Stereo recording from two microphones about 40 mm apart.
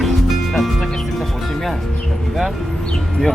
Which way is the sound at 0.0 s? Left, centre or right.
Centre.